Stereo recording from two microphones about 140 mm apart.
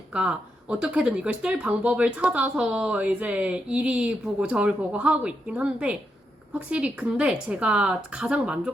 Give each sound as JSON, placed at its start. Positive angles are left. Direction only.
{"t": 0.1, "sound": "speech", "side_deg": -5}